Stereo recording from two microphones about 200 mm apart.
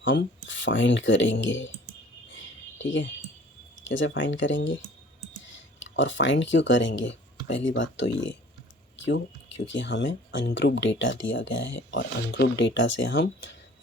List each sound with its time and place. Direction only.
0.0 s speech: 65° left (ahead or behind)
2.3 s a sound: 70° left (ahead or behind)
3.8 s speech: 70° left (ahead or behind)
5.8 s speech: 65° left (ahead or behind)